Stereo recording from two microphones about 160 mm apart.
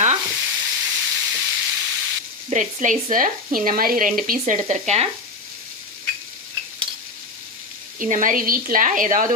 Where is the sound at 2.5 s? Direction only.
50° right (ahead or behind).